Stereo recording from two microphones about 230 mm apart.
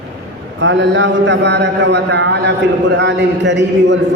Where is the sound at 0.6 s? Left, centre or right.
Right.